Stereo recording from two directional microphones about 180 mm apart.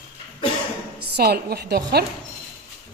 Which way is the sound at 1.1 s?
60° right (ahead or behind).